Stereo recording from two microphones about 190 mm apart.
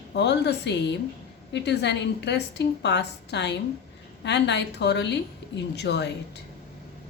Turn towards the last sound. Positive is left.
turn(degrees=65)  # may be behind; listen again after turning